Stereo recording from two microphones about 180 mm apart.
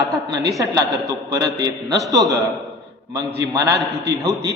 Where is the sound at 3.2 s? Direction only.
20° right (ahead or behind).